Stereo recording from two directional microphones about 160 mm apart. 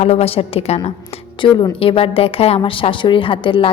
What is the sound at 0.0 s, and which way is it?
A woman's voice, 40° left (ahead or behind).